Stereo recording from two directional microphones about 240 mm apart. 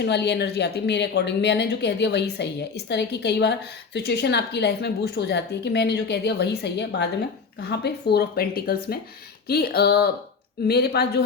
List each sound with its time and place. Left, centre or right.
0.0 s speech: left